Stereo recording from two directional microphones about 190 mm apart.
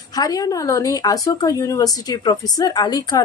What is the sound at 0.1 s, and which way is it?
Speech, 20° left (ahead or behind).